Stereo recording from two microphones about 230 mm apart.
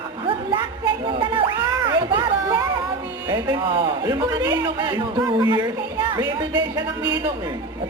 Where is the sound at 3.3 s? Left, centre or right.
Centre.